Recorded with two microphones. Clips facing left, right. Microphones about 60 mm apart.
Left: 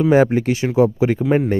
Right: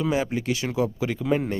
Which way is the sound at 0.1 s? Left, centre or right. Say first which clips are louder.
Left 10 dB; left.